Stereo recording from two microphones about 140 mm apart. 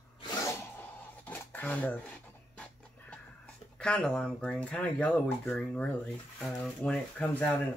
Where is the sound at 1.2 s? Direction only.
15° left (ahead or behind).